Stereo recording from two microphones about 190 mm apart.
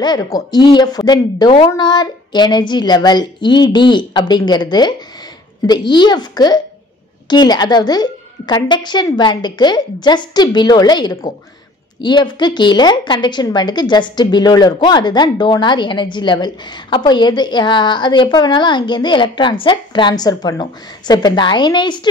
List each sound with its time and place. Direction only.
0.0 s a woman's voice: 20° left (ahead or behind)